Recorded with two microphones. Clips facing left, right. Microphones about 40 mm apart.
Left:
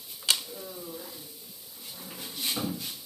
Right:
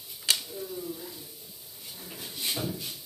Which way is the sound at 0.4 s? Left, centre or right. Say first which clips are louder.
Right 4 dB; centre.